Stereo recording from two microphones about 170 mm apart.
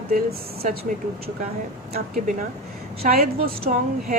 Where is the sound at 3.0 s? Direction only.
60° right (ahead or behind).